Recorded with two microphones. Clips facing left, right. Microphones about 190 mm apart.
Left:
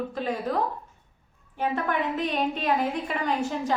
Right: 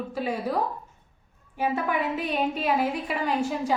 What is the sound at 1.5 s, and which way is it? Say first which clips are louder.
A woman's voice: right 1 dB; 10° right (ahead or behind).